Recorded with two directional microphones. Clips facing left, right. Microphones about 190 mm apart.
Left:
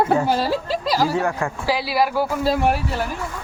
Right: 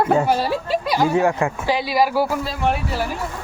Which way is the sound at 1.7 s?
5° left (ahead or behind).